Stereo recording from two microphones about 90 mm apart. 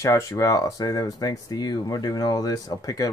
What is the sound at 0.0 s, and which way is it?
Speech, 35° left (ahead or behind).